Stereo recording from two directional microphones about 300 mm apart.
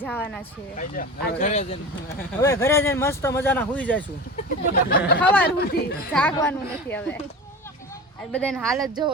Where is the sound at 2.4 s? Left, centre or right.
Centre.